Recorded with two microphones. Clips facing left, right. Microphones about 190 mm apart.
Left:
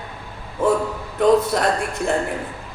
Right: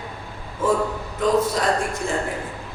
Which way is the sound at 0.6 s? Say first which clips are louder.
Left 3 dB; 65° left (ahead or behind).